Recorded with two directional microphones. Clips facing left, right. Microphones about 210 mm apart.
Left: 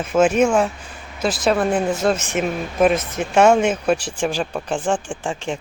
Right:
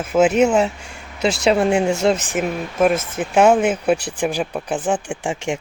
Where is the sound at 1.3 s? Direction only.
25° right (ahead or behind).